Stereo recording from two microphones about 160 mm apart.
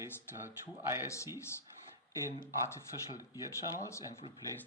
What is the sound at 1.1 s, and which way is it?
Speech, 20° left (ahead or behind).